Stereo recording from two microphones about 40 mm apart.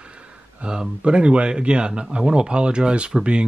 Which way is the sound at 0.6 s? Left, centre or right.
Right.